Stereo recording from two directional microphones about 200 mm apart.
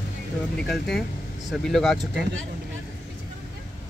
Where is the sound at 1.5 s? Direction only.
Centre (ahead or behind).